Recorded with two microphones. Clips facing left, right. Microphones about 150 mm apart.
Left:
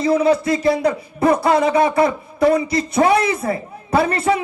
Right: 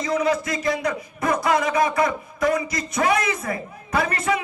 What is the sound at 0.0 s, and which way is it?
A man's voice, 30° left (ahead or behind).